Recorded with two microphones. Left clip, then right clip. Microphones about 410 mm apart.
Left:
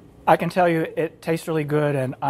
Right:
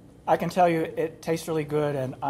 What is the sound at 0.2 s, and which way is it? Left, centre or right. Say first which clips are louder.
Speech: left 4 dB; left.